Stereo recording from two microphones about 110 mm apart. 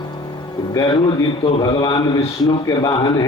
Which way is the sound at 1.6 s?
35° left (ahead or behind).